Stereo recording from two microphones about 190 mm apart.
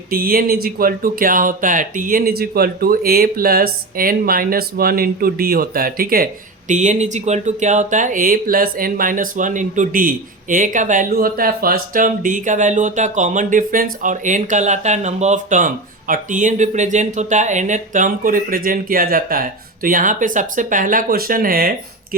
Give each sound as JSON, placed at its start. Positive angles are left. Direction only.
{"t": 0.1, "sound": "speech", "side_deg": -50}
{"t": 6.7, "sound": "speech", "side_deg": -40}